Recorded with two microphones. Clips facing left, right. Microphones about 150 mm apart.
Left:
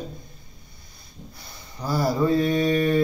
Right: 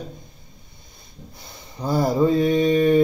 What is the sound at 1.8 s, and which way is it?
Speech, 20° right (ahead or behind).